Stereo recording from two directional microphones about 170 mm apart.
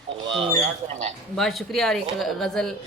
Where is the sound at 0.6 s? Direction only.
40° right (ahead or behind).